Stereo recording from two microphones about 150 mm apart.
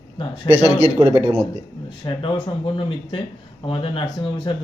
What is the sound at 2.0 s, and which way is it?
Speech, 30° left (ahead or behind).